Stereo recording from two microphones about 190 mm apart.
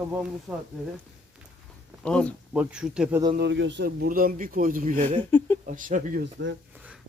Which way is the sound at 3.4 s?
70° right (ahead or behind).